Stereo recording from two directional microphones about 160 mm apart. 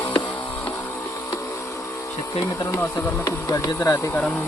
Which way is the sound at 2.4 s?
15° left (ahead or behind).